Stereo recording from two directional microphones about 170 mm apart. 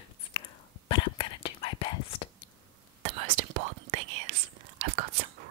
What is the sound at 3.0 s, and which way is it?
Whispering, 40° right (ahead or behind).